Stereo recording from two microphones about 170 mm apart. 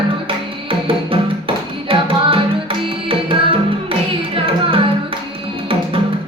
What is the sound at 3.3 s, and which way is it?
Music, 30° right (ahead or behind).